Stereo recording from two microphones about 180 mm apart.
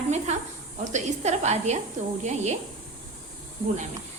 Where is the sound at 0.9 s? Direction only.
40° right (ahead or behind).